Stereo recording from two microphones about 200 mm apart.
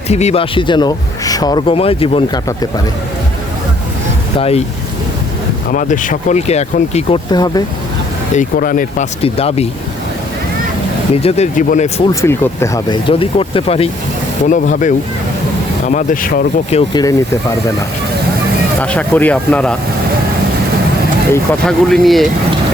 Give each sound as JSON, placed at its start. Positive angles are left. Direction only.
{"t": 0.1, "sound": "speech", "side_deg": 35}
{"t": 4.4, "sound": "speech", "side_deg": 30}
{"t": 5.7, "sound": "speech", "side_deg": 40}
{"t": 8.3, "sound": "speech", "side_deg": 40}
{"t": 9.2, "sound": "speech", "side_deg": 30}
{"t": 11.1, "sound": "speech", "side_deg": 30}
{"t": 12.2, "sound": "speech", "side_deg": 15}
{"t": 14.4, "sound": "speech", "side_deg": 40}
{"t": 16.9, "sound": "speech", "side_deg": 20}
{"t": 18.8, "sound": "speech", "side_deg": 5}
{"t": 21.7, "sound": "speech", "side_deg": 0}